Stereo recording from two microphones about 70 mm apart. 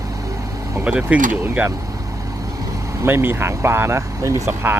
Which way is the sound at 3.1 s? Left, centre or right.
Right.